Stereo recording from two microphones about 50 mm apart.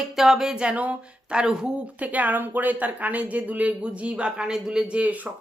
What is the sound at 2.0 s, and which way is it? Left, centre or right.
A woman's voice, right.